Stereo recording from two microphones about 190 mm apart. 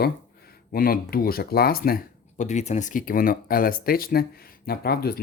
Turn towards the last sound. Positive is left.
turn(degrees=55)  # may be behind; listen again after turning